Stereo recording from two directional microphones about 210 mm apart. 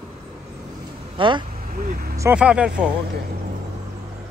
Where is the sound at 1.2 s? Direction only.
25° right (ahead or behind).